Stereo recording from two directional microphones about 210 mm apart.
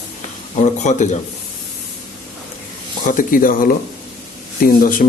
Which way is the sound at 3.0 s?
40° left (ahead or behind).